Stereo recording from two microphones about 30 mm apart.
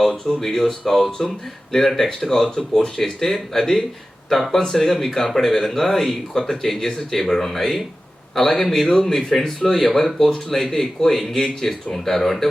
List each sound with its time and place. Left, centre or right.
0.3 s speech: centre
11.3 s speech: left
12.0 s speech: centre